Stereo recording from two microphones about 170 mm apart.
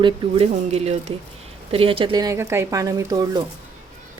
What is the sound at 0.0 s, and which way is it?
A woman's voice, 35° right (ahead or behind).